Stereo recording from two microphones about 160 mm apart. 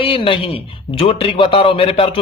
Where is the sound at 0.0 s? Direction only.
35° left (ahead or behind).